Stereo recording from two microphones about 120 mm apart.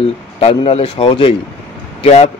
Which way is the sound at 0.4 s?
55° left (ahead or behind).